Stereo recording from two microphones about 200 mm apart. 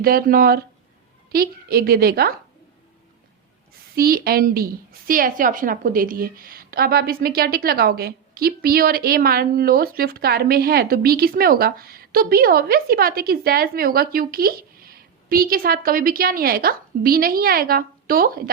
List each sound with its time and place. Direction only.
0.0 s a woman's voice: 50° right (ahead or behind)
3.9 s a woman's voice: 50° right (ahead or behind)